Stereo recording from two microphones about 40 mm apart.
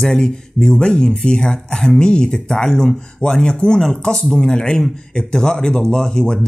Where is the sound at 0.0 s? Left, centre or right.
Centre.